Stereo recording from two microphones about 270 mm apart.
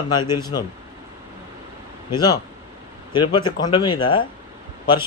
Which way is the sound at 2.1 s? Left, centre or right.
Centre.